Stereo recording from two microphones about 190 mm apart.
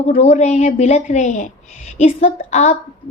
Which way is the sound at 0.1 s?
35° left (ahead or behind).